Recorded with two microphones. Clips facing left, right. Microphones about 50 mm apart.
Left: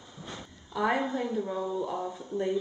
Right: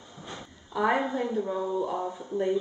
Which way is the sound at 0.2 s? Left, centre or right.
Centre.